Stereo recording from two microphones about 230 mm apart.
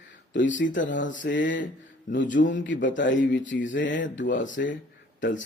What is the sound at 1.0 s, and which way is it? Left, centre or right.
Speech, left.